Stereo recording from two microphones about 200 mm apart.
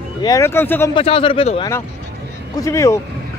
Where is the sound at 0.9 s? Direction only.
25° left (ahead or behind).